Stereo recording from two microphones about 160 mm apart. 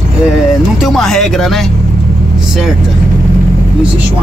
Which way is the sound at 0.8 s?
Centre (ahead or behind).